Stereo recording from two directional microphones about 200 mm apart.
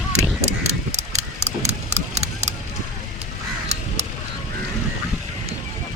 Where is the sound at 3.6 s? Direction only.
35° right (ahead or behind).